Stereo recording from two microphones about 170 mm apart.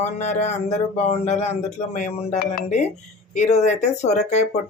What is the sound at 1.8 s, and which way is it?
Speech, 40° left (ahead or behind).